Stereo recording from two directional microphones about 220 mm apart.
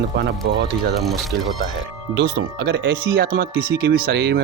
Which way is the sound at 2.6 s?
45° right (ahead or behind).